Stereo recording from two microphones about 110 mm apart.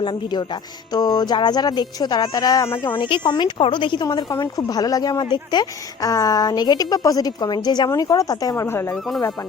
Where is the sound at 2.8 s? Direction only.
45° left (ahead or behind); by 8.9 s 20° left (ahead or behind).